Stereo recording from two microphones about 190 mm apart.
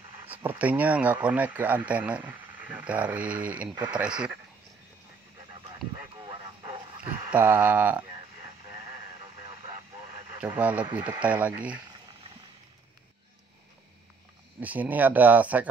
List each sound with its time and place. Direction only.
0.3 s speech: 10° right (ahead or behind)
6.1 s vehicle: 25° right (ahead or behind)
7.3 s speech: 10° right (ahead or behind)
10.4 s speech: 5° right (ahead or behind)
14.6 s speech: 10° right (ahead or behind)